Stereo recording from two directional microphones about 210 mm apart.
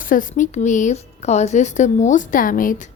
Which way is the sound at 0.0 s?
40° left (ahead or behind).